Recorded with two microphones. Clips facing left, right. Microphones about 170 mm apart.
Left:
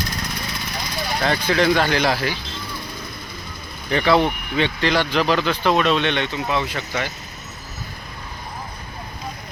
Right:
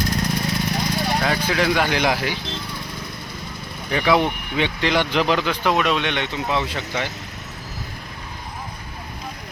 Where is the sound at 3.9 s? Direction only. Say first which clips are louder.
Left 1 dB; 10° right (ahead or behind).